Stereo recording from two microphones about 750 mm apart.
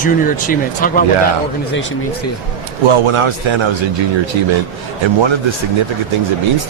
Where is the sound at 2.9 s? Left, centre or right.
Right.